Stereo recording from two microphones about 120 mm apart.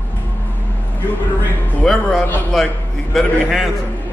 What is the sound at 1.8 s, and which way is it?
Speech, 5° left (ahead or behind).